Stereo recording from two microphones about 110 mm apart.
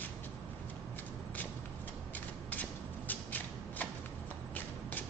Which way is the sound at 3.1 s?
15° left (ahead or behind).